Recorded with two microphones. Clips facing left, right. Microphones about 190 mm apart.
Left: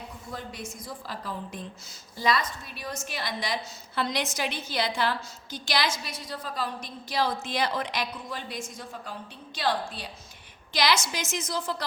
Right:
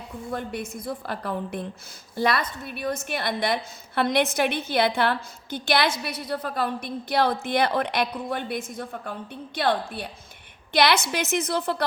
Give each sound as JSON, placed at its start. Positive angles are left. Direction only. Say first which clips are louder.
{"t": 0.3, "sound": "a woman's voice", "louder": "right 8 dB", "side_deg": -55}